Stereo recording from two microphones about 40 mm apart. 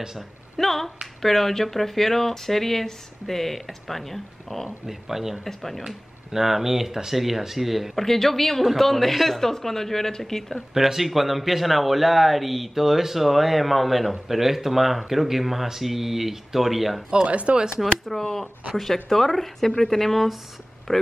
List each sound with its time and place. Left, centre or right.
0.6 s speech: centre
4.8 s speech: centre
5.4 s speech: centre
5.9 s speech: centre
8.0 s speech: centre
10.7 s speech: centre
17.3 s speech: right
18.2 s speech: centre